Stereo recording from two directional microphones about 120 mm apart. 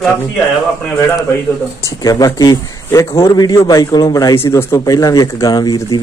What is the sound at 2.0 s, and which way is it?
A man's voice, 30° left (ahead or behind).